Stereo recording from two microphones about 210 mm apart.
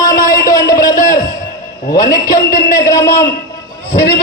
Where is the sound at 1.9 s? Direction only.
15° left (ahead or behind).